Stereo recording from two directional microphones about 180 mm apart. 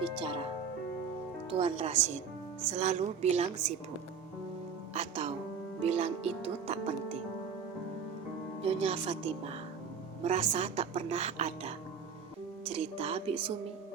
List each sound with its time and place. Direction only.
0.0 s music: 30° right (ahead or behind)
1.5 s a woman's voice: 35° right (ahead or behind)
4.9 s music: 35° right (ahead or behind)
5.8 s a woman's voice: 35° right (ahead or behind)
8.6 s a woman's voice: 35° right (ahead or behind)